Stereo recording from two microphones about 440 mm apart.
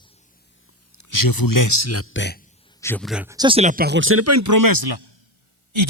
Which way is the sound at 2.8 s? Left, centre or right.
Centre.